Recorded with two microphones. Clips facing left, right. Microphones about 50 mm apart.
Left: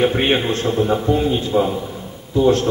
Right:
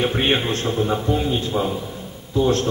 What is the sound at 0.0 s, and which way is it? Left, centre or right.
A man's voice, centre.